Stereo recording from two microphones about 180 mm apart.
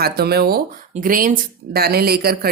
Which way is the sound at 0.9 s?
50° right (ahead or behind).